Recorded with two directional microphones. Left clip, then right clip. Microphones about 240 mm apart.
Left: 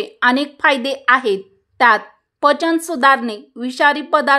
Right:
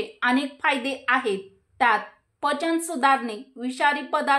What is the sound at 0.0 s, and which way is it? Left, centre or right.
A woman's voice, left.